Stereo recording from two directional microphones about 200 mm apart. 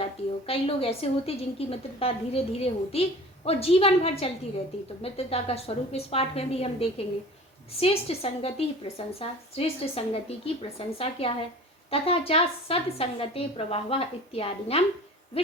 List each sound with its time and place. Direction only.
0.0 s a woman's voice: 30° left (ahead or behind)